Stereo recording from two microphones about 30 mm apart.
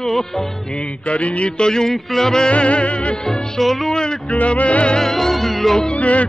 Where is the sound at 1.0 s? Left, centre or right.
Left.